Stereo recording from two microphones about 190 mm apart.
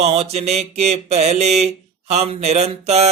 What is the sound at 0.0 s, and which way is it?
Speech, 35° right (ahead or behind).